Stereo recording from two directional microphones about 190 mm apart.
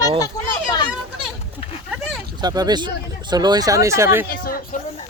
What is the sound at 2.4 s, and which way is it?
Speech, 20° right (ahead or behind).